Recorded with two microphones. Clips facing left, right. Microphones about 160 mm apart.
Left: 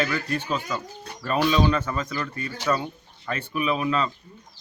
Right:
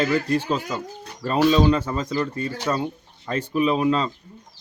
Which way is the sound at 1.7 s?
30° right (ahead or behind).